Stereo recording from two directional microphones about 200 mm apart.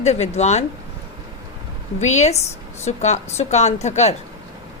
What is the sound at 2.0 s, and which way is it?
A woman's voice, 35° left (ahead or behind).